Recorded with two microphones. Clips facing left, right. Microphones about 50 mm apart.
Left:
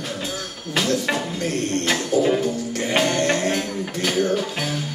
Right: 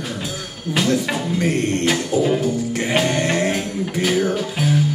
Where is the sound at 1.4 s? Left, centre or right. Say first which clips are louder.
Right 4 dB; right.